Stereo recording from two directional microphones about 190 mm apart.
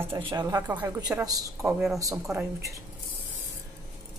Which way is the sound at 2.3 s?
15° right (ahead or behind).